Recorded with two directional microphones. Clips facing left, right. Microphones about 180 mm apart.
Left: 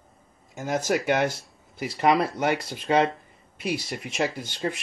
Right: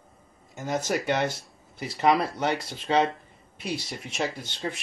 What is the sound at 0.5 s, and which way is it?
Speech, centre (ahead or behind).